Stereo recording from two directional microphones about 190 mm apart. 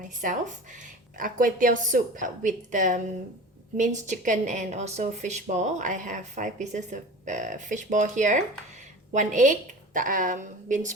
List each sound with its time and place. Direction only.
0.8 s a woman's voice: 45° right (ahead or behind)